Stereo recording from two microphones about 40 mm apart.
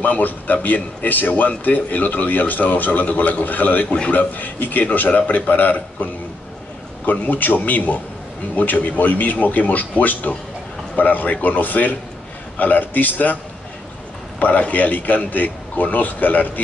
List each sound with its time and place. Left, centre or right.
0.0 s a man's voice: left
7.1 s a man's voice: left
14.4 s a man's voice: left